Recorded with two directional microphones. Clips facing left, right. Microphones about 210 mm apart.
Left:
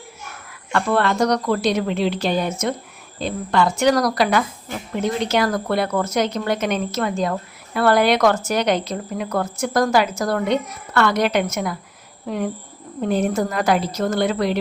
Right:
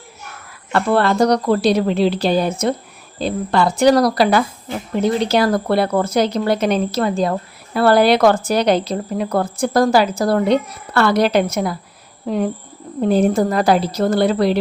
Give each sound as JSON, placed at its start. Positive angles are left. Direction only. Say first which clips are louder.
{"t": 0.7, "sound": "speech", "louder": "right 3 dB", "side_deg": -35}